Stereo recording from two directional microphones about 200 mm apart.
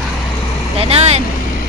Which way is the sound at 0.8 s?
30° right (ahead or behind).